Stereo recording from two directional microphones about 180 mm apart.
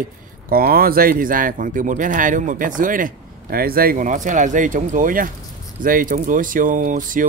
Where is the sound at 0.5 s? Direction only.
55° right (ahead or behind).